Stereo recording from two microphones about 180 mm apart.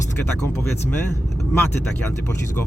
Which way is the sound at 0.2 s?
10° left (ahead or behind).